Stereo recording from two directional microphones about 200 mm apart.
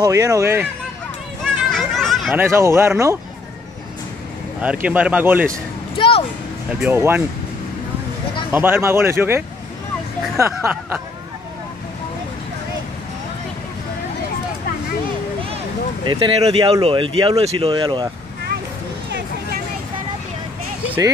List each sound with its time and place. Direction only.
0.0 s speech: 15° right (ahead or behind)
1.4 s a sound: centre (ahead or behind)
2.3 s speech: 15° right (ahead or behind)
4.6 s speech: 5° right (ahead or behind)
5.9 s music: 25° left (ahead or behind)
6.8 s speech: 10° right (ahead or behind)
8.5 s speech: 10° right (ahead or behind)
16.1 s speech: 25° right (ahead or behind)
19.0 s hubbub: 60° right (ahead or behind)